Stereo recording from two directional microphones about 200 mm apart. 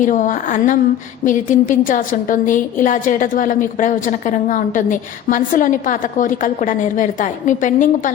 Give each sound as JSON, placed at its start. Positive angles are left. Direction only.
{"t": 0.0, "sound": "a woman's voice", "side_deg": 40}